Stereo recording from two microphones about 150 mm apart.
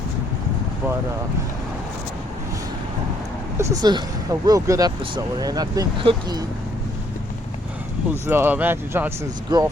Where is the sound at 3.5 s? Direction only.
25° right (ahead or behind).